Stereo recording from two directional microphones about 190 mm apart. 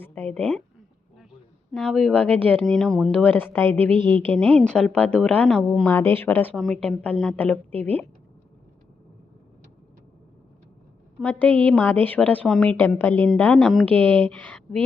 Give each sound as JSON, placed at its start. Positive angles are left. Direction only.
{"t": 0.0, "sound": "a woman's voice", "side_deg": 10}
{"t": 1.7, "sound": "a woman's voice", "side_deg": 0}
{"t": 3.8, "sound": "a woman's voice", "side_deg": -25}
{"t": 4.4, "sound": "a woman's voice", "side_deg": 5}
{"t": 11.2, "sound": "a woman's voice", "side_deg": 10}